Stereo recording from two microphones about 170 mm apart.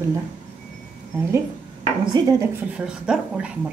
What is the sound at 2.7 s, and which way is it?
Speech, 5° right (ahead or behind).